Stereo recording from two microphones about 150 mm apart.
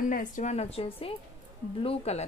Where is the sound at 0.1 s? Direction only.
55° left (ahead or behind).